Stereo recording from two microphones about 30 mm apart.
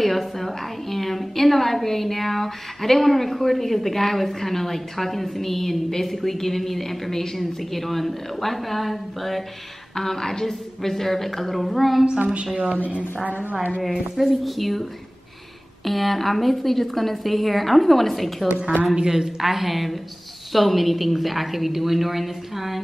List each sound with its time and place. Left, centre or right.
0.0 s a woman's voice: centre
9.9 s a woman's voice: centre
12.7 s speech: right
13.6 s speech: right
13.8 s a woman's voice: centre
19.0 s a woman's voice: centre
19.4 s a woman's voice: centre